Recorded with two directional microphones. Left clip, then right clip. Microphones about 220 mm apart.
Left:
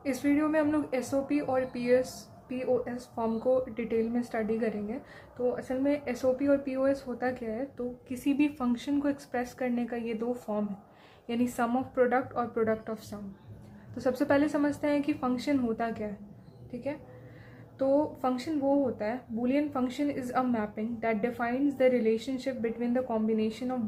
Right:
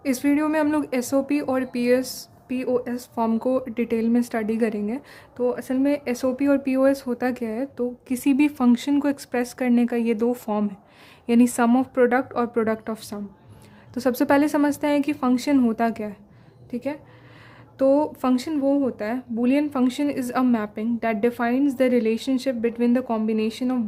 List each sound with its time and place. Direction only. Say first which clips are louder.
0.0 s speech: right 6 dB; 50° right (ahead or behind)